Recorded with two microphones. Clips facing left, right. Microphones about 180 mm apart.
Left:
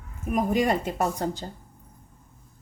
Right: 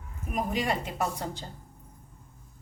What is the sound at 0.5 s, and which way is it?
Speech, 45° left (ahead or behind).